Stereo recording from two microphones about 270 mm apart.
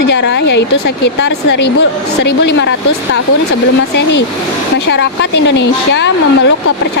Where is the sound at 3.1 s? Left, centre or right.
Left.